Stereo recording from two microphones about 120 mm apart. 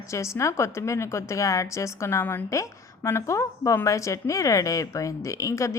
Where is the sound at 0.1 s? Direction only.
25° left (ahead or behind).